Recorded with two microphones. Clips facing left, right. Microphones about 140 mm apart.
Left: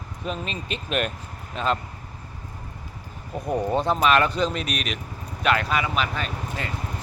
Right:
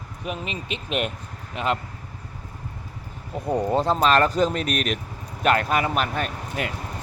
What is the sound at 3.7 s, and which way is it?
Speech, 30° right (ahead or behind).